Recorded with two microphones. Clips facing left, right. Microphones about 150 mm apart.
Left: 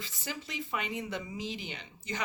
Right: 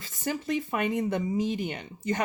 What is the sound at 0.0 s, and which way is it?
Speech, 50° right (ahead or behind).